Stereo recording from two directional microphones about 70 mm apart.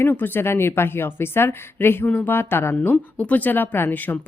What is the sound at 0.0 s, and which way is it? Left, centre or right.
A woman's voice, left.